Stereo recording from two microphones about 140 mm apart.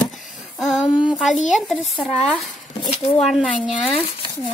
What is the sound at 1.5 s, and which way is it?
Speech, 5° right (ahead or behind).